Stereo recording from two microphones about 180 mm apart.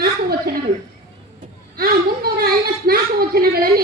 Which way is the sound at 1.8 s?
55° right (ahead or behind).